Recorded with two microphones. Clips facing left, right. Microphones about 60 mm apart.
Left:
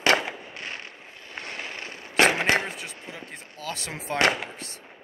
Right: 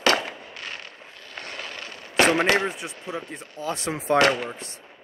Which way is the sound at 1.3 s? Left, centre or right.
Left.